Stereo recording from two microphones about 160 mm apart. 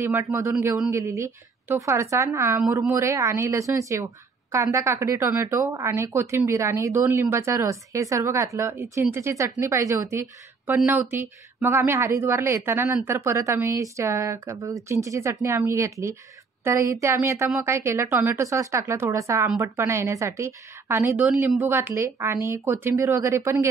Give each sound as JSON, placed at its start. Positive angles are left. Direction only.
{"t": 0.0, "sound": "a woman's voice", "side_deg": -15}